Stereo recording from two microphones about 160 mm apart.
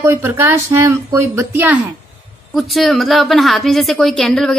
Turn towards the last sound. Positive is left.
turn(degrees=0)  # may be behind; listen again after turning